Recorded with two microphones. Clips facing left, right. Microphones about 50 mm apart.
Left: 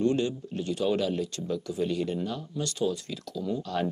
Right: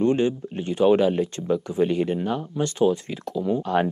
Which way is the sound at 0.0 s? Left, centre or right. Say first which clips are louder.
Right 5 dB; right.